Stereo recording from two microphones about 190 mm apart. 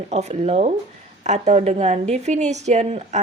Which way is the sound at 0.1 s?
35° right (ahead or behind).